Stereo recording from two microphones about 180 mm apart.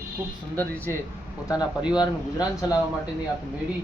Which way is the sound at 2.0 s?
20° left (ahead or behind).